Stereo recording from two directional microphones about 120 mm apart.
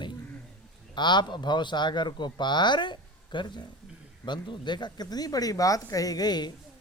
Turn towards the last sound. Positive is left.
turn(degrees=35)  # may be behind; listen again after turning